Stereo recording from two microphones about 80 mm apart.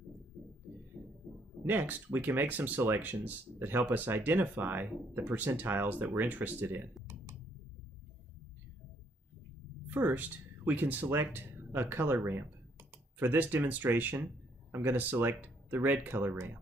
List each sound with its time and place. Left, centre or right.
1.0 s a sound: right
1.6 s speech: right
9.8 s speech: right